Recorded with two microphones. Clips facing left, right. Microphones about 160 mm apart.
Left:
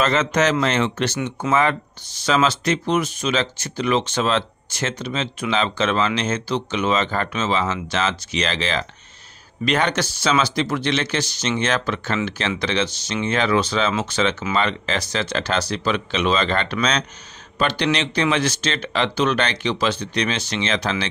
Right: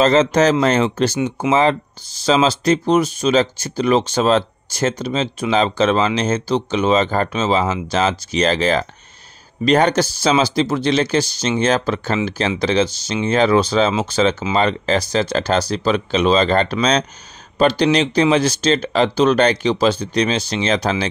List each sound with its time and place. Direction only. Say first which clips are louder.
0.0 s speech: right 6 dB; 30° right (ahead or behind)
1.1 s speech: right 5 dB; 10° right (ahead or behind)
1.5 s speech: right 3 dB; 30° right (ahead or behind)